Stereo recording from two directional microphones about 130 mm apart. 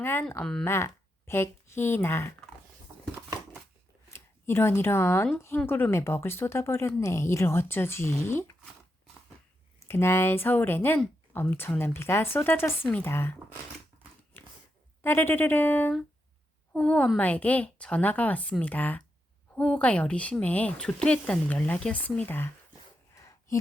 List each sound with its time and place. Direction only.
0.0 s speech: 15° left (ahead or behind)
0.6 s speech: 20° left (ahead or behind)
4.1 s speech: 20° left (ahead or behind)
9.8 s speech: 20° left (ahead or behind)
14.3 s a sound: 15° left (ahead or behind)
15.0 s speech: 15° left (ahead or behind)
23.1 s a sound: 20° left (ahead or behind)